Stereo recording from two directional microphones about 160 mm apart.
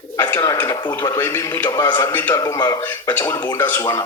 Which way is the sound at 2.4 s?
25° left (ahead or behind).